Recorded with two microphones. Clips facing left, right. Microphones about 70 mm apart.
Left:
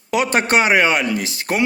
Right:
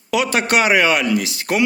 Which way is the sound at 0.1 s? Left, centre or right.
Left.